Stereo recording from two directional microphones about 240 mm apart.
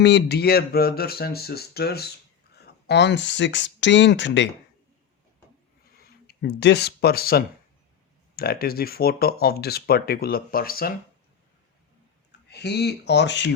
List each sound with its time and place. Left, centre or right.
0.0 s speech: left
6.0 s speech: left
12.5 s speech: left